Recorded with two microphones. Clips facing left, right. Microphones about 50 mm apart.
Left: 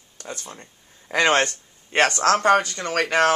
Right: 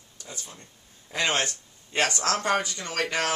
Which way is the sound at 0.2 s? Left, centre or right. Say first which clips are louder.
Left 7 dB; left.